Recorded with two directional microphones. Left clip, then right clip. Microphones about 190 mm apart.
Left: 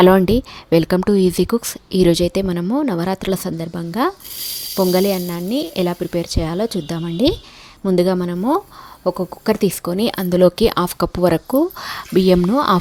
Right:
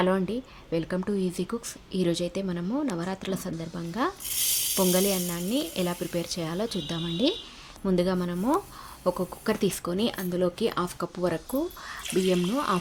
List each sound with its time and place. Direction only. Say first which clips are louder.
0.0 s speech: left 14 dB; 55° left (ahead or behind)